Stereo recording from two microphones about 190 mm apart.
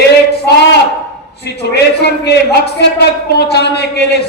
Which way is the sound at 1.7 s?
60° left (ahead or behind).